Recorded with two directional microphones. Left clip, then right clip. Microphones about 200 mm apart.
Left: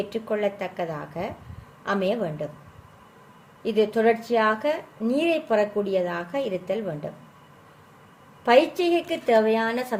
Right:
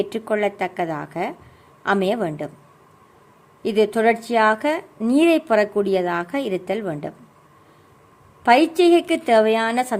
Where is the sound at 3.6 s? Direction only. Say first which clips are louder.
Right 3 dB; 60° right (ahead or behind).